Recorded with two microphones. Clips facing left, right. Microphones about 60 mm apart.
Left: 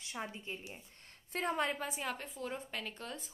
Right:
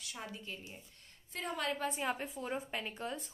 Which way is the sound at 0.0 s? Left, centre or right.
Left.